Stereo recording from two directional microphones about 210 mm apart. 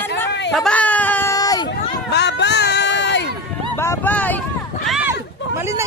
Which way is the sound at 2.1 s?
55° left (ahead or behind).